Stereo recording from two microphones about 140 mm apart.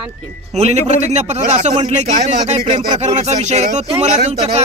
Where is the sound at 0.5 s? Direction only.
50° right (ahead or behind).